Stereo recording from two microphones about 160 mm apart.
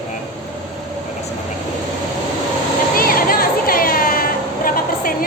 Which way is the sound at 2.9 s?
65° left (ahead or behind).